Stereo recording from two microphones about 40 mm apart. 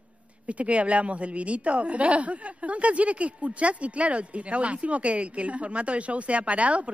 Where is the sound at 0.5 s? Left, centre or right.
Right.